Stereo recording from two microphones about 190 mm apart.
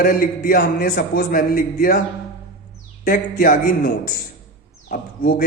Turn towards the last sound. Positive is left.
turn(degrees=50)  # may be behind; listen again after turning